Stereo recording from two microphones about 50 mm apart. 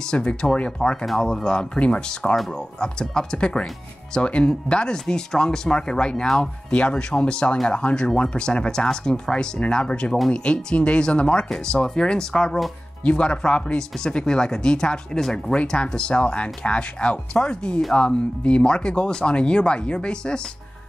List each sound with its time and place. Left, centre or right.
0.0 s speech: centre